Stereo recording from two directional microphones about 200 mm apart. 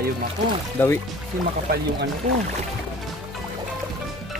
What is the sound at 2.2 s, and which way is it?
Speech, 35° right (ahead or behind).